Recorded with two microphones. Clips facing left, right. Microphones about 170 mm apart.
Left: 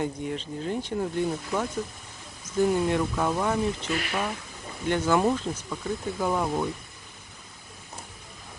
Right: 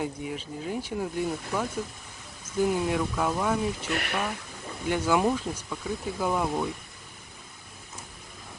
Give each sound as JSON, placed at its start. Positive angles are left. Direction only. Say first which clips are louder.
{"t": 0.0, "sound": "speech", "louder": "left 2 dB", "side_deg": -5}